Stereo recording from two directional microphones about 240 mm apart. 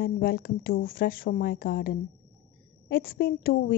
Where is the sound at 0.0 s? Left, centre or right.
Left.